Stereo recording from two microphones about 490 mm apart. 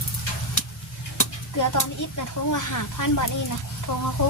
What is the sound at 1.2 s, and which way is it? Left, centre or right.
Speech, left.